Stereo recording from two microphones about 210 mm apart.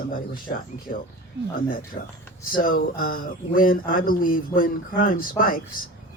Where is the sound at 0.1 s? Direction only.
40° left (ahead or behind).